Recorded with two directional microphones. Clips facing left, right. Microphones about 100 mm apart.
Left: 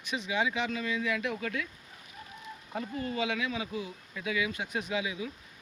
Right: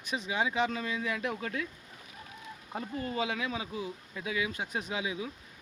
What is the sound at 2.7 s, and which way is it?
Speech, 30° right (ahead or behind).